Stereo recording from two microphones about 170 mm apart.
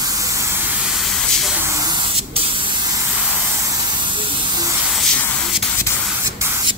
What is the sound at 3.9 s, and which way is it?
Hiss, 25° right (ahead or behind).